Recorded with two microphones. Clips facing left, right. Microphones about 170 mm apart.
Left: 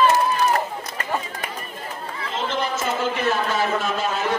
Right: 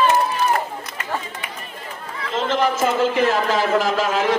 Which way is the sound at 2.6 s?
90° right.